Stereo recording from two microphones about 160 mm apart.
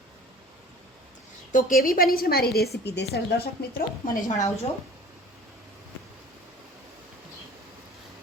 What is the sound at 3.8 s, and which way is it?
Speech, 60° left (ahead or behind).